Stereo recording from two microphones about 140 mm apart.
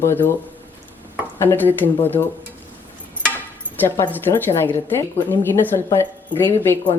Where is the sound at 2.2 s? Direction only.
30° left (ahead or behind).